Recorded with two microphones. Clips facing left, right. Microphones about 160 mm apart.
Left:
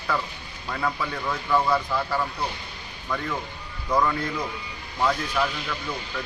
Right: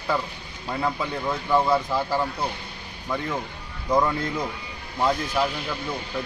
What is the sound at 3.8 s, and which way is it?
Speech, 20° right (ahead or behind).